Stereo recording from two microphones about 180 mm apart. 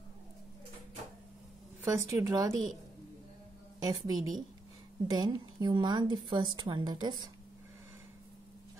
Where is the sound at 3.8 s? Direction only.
20° right (ahead or behind).